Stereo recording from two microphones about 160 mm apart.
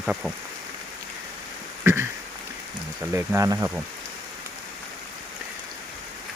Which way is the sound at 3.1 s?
15° right (ahead or behind).